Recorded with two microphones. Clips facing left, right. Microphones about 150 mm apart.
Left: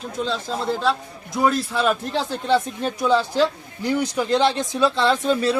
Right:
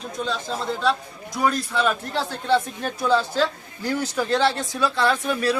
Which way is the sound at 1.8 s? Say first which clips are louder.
Left 2 dB; 20° left (ahead or behind).